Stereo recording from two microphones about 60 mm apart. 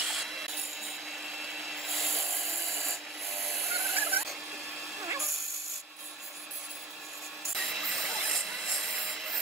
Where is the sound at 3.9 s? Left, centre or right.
Right.